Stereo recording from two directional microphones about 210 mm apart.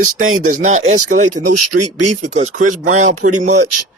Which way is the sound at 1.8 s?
90° right.